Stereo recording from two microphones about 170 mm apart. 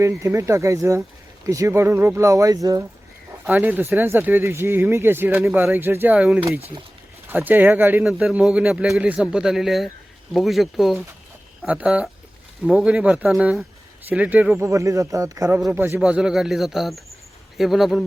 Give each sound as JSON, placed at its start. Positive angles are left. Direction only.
{"t": 0.0, "sound": "speech", "side_deg": -15}
{"t": 3.4, "sound": "speech", "side_deg": -10}
{"t": 5.4, "sound": "a man's voice", "side_deg": 0}
{"t": 5.6, "sound": "a man's voice", "side_deg": -15}